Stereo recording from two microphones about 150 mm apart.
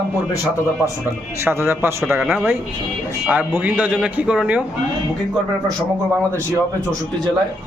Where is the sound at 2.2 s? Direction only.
Centre (ahead or behind).